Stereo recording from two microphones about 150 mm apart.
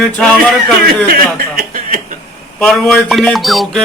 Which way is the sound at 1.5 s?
60° right (ahead or behind).